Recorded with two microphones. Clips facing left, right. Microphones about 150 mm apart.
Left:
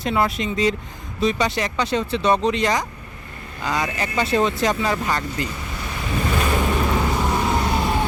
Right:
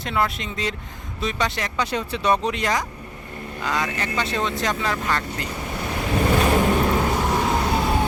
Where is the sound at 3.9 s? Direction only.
5° left (ahead or behind).